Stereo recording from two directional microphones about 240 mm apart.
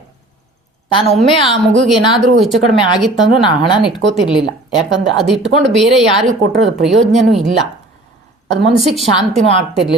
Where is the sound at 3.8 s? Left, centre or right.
Centre.